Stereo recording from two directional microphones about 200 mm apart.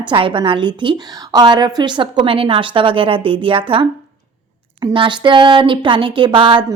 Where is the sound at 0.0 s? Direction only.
25° right (ahead or behind).